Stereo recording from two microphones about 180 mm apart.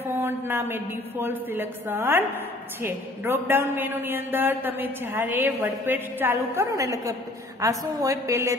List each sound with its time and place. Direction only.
0.0 s a woman's voice: 10° right (ahead or behind)